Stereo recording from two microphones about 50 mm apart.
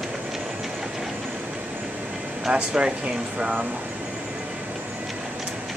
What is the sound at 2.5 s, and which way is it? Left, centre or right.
Speech, centre.